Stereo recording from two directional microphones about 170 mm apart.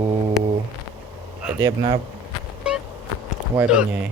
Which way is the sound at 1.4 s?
5° right (ahead or behind).